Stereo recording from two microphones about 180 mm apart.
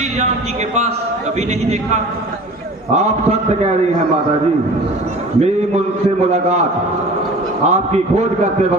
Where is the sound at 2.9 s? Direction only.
40° right (ahead or behind).